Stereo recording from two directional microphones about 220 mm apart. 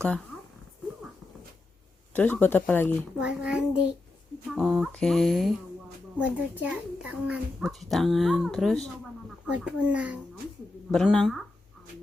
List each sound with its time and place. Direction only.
2.1 s speech: 10° left (ahead or behind)
3.2 s a child's voice: 5° right (ahead or behind)